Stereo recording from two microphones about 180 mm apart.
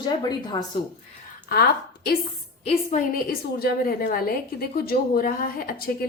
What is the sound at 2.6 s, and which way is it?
A woman's voice, 45° left (ahead or behind).